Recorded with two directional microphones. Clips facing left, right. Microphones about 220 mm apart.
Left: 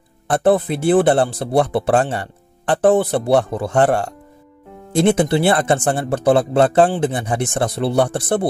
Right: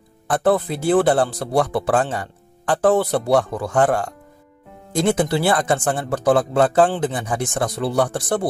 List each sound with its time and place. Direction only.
0.4 s speech: 20° left (ahead or behind)